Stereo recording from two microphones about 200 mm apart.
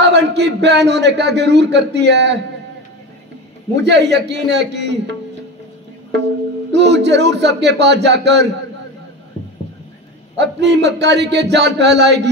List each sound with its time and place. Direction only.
0.0 s speech: 60° right (ahead or behind)
3.7 s speech: 60° right (ahead or behind)
6.7 s speech: 60° right (ahead or behind)
10.3 s speech: 60° right (ahead or behind)